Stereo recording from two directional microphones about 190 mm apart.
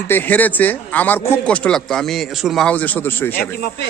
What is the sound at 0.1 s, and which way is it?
Speech, 10° left (ahead or behind).